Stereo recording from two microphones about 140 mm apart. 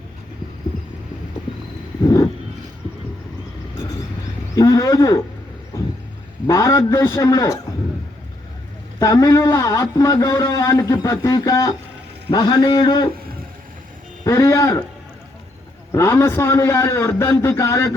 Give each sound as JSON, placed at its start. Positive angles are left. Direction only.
{"t": 4.5, "sound": "a man's voice", "side_deg": 25}
{"t": 6.5, "sound": "a man's voice", "side_deg": 25}
{"t": 9.0, "sound": "a man's voice", "side_deg": 25}
{"t": 14.3, "sound": "a man's voice", "side_deg": 20}
{"t": 15.9, "sound": "a man's voice", "side_deg": 20}